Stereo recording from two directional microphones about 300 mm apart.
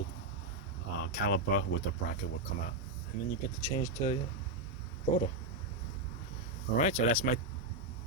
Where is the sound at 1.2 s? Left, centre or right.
Left.